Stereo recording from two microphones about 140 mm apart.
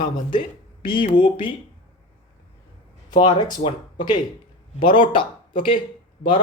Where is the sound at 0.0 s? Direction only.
35° left (ahead or behind).